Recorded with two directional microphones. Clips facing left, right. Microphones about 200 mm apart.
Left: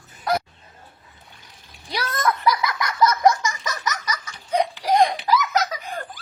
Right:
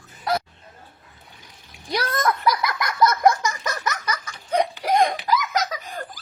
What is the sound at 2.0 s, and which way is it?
Giggle, 55° right (ahead or behind).